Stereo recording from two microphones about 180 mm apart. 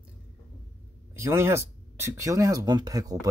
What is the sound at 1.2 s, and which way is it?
Speech, 15° right (ahead or behind).